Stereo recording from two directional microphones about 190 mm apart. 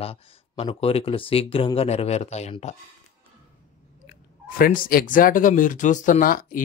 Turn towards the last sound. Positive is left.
turn(degrees=45)  # may be behind; listen again after turning